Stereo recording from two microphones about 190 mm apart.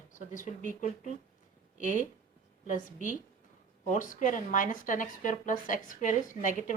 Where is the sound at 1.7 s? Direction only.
40° left (ahead or behind).